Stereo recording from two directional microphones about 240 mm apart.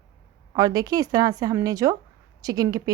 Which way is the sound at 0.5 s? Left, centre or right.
Centre.